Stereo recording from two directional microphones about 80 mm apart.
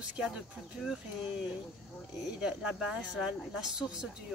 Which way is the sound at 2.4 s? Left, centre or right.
Centre.